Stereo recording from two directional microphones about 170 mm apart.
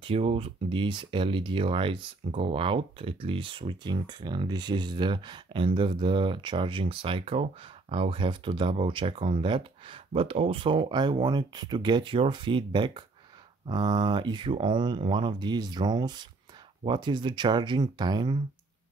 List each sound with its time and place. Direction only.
0.0 s speech: 35° right (ahead or behind)